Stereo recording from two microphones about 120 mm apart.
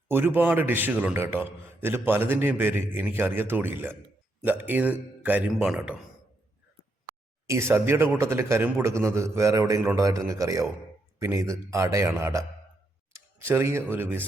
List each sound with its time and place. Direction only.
0.1 s a man's voice: 15° right (ahead or behind)
7.4 s a man's voice: 25° right (ahead or behind)